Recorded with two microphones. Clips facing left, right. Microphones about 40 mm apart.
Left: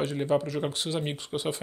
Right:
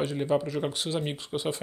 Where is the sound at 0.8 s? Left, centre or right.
Left.